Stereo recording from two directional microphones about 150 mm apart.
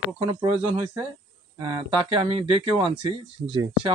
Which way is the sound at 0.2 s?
40° right (ahead or behind).